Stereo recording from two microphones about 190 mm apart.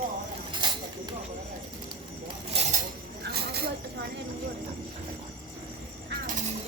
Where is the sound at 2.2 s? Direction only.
35° right (ahead or behind).